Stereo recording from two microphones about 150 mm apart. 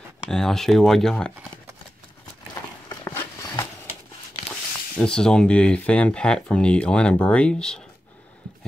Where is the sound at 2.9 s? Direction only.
20° left (ahead or behind).